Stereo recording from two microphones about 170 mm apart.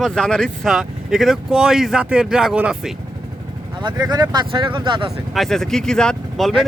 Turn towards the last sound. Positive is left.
turn(degrees=0)  # may be behind; listen again after turning